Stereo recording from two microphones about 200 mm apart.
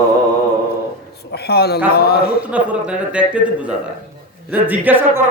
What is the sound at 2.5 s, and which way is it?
Speech, 5° right (ahead or behind).